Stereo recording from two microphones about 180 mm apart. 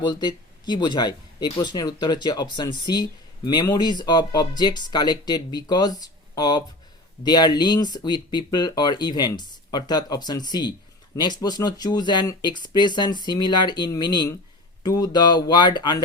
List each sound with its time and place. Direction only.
0.0 s speech: 25° left (ahead or behind)